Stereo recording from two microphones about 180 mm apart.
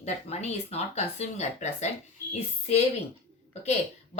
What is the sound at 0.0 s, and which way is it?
Speech, 35° left (ahead or behind).